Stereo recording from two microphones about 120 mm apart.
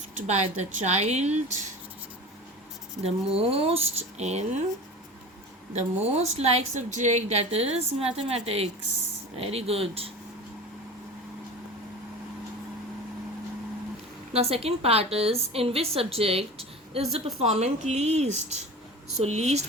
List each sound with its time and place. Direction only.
0.3 s a woman's voice: 70° right (ahead or behind)
3.3 s a woman's voice: 55° right (ahead or behind)
5.7 s a woman's voice: 65° right (ahead or behind)
14.3 s a woman's voice: 55° right (ahead or behind)